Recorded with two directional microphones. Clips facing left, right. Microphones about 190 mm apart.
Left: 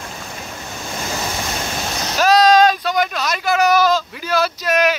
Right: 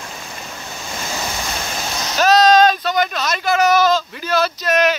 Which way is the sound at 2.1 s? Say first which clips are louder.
Even; 10° left (ahead or behind).